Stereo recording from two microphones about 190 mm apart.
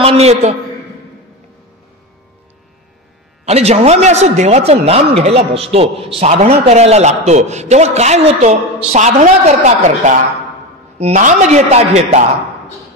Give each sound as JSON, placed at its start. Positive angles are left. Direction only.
{"t": 0.0, "sound": "a man's voice", "side_deg": -35}
{"t": 3.4, "sound": "speech", "side_deg": -35}